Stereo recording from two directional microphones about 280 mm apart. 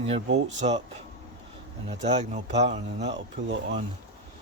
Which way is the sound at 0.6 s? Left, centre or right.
Right.